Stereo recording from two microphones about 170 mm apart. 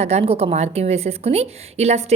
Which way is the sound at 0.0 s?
35° right (ahead or behind).